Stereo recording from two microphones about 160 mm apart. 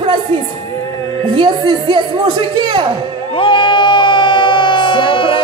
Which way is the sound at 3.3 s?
30° left (ahead or behind).